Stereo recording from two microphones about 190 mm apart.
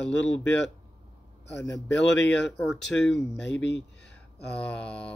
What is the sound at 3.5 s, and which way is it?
Speech, 70° left (ahead or behind).